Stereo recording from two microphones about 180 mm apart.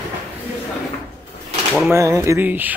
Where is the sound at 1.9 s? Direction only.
15° right (ahead or behind).